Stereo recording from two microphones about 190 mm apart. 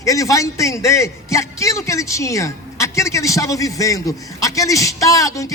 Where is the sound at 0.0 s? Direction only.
15° left (ahead or behind).